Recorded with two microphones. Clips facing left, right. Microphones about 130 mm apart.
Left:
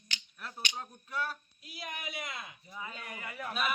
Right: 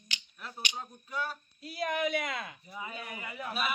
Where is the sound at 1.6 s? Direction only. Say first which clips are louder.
Right 10 dB; 45° right (ahead or behind).